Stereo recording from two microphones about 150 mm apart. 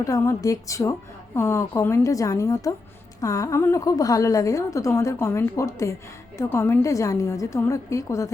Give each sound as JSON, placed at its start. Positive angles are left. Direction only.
{"t": 0.0, "sound": "a woman's voice", "side_deg": 20}